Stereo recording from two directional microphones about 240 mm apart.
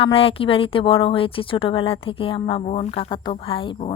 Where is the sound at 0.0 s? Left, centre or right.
Left.